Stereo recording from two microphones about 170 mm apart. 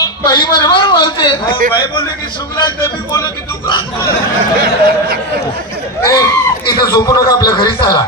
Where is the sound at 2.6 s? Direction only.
20° left (ahead or behind).